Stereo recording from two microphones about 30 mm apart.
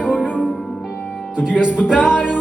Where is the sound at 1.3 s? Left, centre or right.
Right.